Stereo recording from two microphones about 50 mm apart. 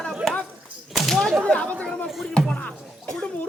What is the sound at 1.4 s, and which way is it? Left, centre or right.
Speech, left.